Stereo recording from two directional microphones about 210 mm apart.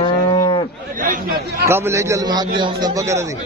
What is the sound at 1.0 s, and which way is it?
Speech, 40° right (ahead or behind).